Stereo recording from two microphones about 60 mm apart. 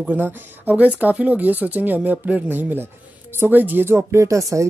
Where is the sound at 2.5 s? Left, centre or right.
Right.